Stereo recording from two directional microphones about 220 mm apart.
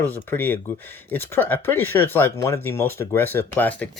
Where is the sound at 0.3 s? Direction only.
10° left (ahead or behind).